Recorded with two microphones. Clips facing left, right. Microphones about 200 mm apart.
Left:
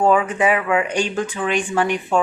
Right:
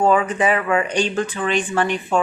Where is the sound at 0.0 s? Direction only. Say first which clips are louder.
Even; 5° left (ahead or behind).